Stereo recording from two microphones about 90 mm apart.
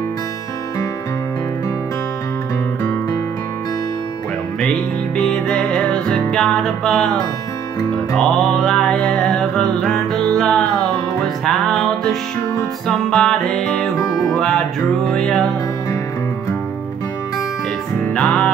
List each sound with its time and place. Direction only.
5.1 s music: 5° left (ahead or behind)
8.2 s music: 5° left (ahead or behind)
18.1 s music: 15° left (ahead or behind)